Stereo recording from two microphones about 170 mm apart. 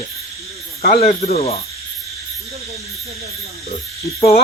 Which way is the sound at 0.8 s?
40° left (ahead or behind).